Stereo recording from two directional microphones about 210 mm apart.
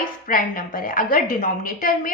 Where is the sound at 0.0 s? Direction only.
40° left (ahead or behind).